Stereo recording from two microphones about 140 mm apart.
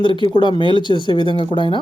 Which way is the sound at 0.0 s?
35° left (ahead or behind).